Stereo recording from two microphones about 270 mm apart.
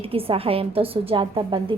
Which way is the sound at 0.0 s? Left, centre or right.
Right.